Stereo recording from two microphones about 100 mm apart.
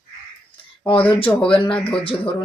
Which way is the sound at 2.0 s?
60° left (ahead or behind).